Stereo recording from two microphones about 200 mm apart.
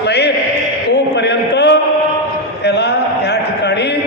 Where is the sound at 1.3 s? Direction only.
55° left (ahead or behind).